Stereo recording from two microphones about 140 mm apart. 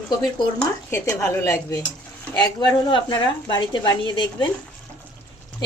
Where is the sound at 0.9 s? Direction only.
15° left (ahead or behind).